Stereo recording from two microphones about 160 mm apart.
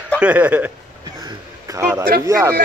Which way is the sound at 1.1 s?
20° right (ahead or behind).